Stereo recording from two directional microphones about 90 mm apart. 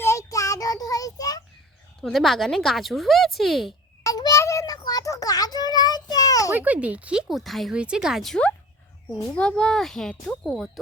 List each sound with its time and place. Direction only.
0.0 s child singing: 35° left (ahead or behind)
2.0 s speech: 5° left (ahead or behind)
4.0 s child singing: 40° left (ahead or behind)
6.5 s speech: 15° right (ahead or behind); by 7.7 s centre (ahead or behind)
7.7 s speech: 10° right (ahead or behind)
9.2 s speech: 10° left (ahead or behind)